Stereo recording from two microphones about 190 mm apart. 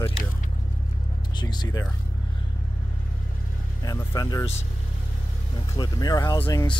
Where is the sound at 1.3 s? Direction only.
20° left (ahead or behind).